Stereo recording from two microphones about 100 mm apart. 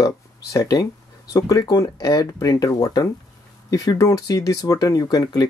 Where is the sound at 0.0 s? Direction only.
35° left (ahead or behind).